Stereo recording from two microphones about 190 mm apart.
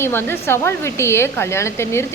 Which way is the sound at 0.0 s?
10° left (ahead or behind).